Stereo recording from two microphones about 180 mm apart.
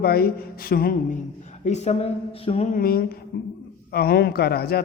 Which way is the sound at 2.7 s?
55° left (ahead or behind).